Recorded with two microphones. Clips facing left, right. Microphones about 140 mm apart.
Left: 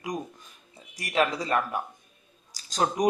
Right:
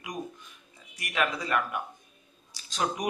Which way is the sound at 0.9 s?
35° left (ahead or behind).